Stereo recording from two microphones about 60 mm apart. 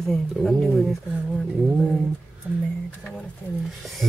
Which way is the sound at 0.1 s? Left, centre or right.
Centre.